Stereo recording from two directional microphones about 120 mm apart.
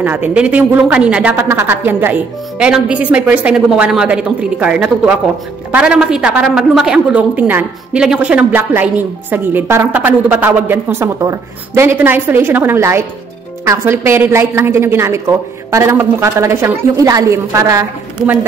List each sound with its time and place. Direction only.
0.0 s a woman's voice: 15° right (ahead or behind)